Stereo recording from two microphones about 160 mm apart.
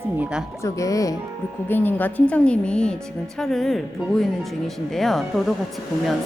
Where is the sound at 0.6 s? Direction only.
20° left (ahead or behind); by 5.5 s centre (ahead or behind).